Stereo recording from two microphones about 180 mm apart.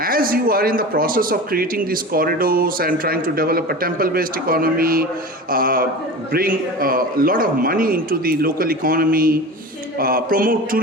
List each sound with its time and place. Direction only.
0.0 s speech: 55° right (ahead or behind)